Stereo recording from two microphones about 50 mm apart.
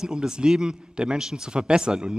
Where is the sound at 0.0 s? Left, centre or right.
Centre.